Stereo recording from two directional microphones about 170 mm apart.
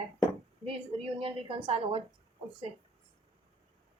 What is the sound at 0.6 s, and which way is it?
A woman's voice, 35° right (ahead or behind).